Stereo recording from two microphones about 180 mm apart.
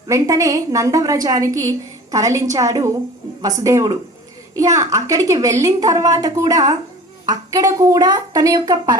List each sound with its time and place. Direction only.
0.1 s a woman's voice: 20° right (ahead or behind)